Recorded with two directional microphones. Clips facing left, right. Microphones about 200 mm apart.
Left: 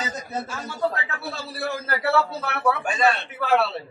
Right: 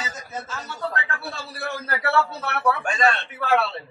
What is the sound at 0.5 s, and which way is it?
A man's voice, 10° left (ahead or behind).